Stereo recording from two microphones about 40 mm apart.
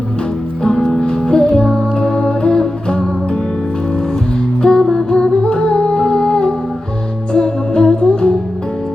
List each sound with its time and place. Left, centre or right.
0.9 s music: centre
4.6 s music: centre